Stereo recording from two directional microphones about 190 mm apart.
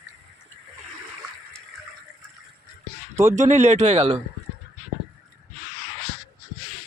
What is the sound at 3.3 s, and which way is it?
Speech, 40° right (ahead or behind).